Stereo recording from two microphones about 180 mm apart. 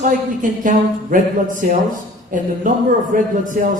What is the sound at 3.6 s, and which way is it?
Speech, 50° right (ahead or behind).